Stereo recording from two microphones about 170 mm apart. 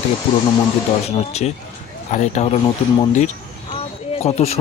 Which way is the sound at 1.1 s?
40° left (ahead or behind).